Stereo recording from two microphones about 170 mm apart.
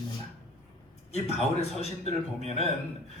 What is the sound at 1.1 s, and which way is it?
A man's voice, 40° left (ahead or behind).